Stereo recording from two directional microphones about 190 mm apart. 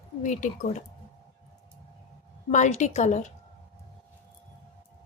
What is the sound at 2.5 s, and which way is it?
Speech, 40° left (ahead or behind).